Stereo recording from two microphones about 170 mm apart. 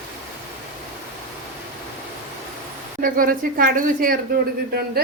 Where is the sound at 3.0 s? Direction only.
55° right (ahead or behind).